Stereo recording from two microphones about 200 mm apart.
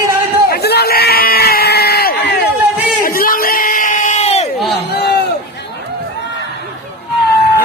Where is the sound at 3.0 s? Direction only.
45° left (ahead or behind).